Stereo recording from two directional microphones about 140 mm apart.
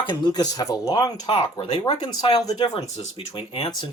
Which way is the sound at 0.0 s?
30° left (ahead or behind).